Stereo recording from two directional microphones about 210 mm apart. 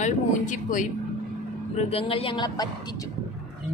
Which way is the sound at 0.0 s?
35° left (ahead or behind).